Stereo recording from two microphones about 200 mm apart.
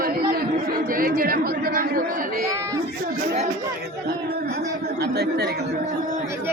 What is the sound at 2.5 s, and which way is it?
Speech, 15° right (ahead or behind).